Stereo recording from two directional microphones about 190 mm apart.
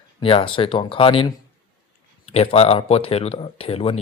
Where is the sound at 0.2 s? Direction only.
30° left (ahead or behind).